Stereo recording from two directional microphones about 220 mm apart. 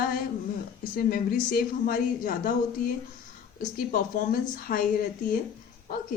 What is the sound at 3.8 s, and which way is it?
Speech, 40° left (ahead or behind).